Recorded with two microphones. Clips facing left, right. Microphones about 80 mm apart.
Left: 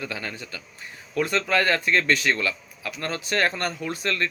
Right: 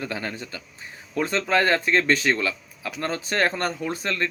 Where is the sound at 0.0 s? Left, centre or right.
Right.